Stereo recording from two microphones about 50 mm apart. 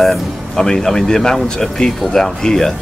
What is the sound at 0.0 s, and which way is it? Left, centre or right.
Speech, centre.